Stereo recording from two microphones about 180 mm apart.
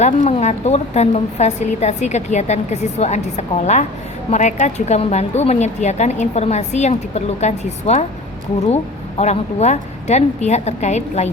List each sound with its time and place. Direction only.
0.0 s a woman's voice: 40° left (ahead or behind)